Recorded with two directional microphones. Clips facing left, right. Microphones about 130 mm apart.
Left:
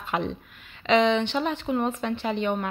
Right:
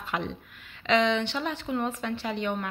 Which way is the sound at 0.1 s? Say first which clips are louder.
Left 4 dB; 25° left (ahead or behind).